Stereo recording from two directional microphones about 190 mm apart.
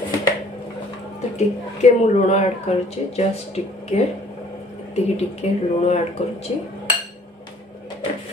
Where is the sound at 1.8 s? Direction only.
35° left (ahead or behind).